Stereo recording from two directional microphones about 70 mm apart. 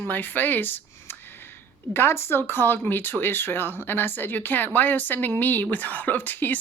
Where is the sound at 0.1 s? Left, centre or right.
Left.